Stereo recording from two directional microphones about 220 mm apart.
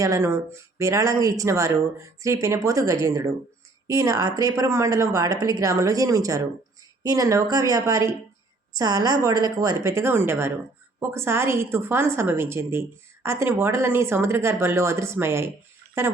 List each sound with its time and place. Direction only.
0.0 s speech: 15° right (ahead or behind)